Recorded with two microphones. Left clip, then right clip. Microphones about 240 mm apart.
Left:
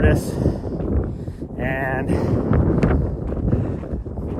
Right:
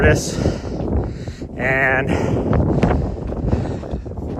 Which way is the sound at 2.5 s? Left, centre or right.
Centre.